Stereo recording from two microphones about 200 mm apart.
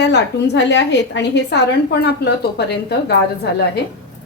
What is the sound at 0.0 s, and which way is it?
A woman's voice, 60° left (ahead or behind).